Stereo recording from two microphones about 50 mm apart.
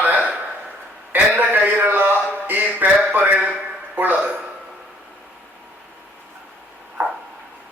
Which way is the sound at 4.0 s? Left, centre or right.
Right.